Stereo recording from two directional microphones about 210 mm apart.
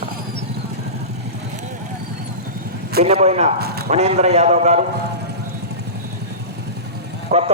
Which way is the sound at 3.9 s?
30° right (ahead or behind).